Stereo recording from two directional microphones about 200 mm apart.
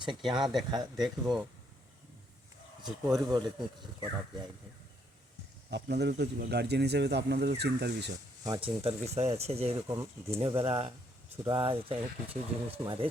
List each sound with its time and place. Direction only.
0.3 s speech: centre (ahead or behind)
0.7 s speech: 20° right (ahead or behind)
1.0 s speech: centre (ahead or behind)
2.8 s speech: 20° right (ahead or behind)
5.7 s speech: 55° right (ahead or behind)
8.4 s speech: 20° right (ahead or behind)
8.8 s speech: 30° right (ahead or behind)
9.8 s speech: 15° right (ahead or behind)
10.4 s speech: 30° right (ahead or behind)